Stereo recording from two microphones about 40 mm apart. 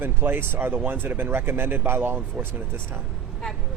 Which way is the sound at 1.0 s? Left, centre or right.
Right.